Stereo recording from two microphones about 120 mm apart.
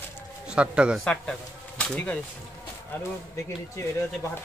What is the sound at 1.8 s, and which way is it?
Speech, 10° left (ahead or behind).